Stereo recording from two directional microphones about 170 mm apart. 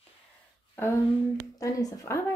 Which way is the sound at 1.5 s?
20° left (ahead or behind).